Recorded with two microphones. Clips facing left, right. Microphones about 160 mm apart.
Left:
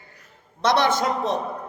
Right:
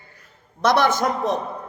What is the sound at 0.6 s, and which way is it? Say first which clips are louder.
Speech: right 2 dB; 50° right (ahead or behind).